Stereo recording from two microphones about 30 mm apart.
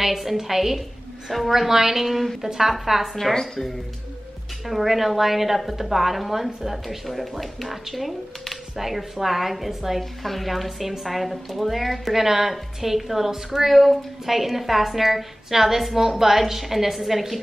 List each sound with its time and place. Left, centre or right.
0.0 s a woman's voice: centre
2.0 s a woman's voice: centre
2.4 s a woman's voice: centre
3.3 s speech: centre
4.6 s a woman's voice: centre